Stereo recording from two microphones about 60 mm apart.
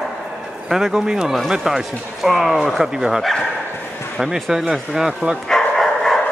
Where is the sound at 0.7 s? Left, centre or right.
Centre.